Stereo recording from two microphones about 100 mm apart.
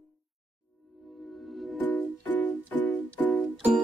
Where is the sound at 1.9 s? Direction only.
15° left (ahead or behind).